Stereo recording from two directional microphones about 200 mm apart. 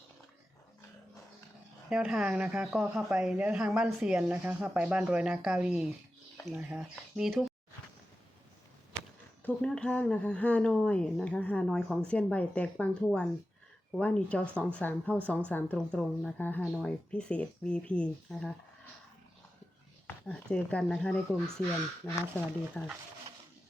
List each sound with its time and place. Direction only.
1.9 s a woman's voice: 5° right (ahead or behind)
9.4 s a woman's voice: 5° left (ahead or behind)
20.1 s a woman's voice: 5° left (ahead or behind)